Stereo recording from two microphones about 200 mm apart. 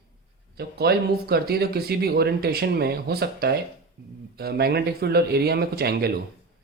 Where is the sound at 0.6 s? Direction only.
50° right (ahead or behind).